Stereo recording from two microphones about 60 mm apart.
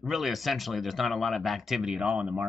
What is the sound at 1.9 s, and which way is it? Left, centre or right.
Speech, centre.